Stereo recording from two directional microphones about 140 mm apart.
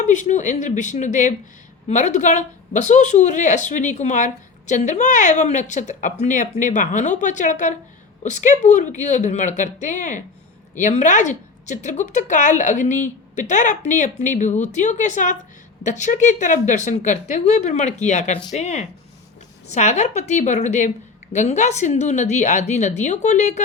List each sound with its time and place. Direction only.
0.0 s speech: 60° left (ahead or behind)